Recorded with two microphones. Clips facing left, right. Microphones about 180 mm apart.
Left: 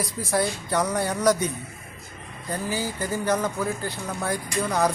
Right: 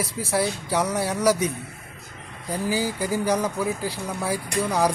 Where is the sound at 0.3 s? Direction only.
5° right (ahead or behind).